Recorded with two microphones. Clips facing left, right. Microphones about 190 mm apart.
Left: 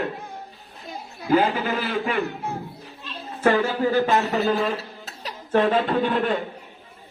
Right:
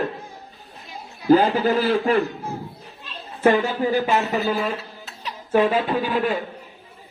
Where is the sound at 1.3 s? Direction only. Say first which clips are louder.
Right 4 dB; 40° right (ahead or behind).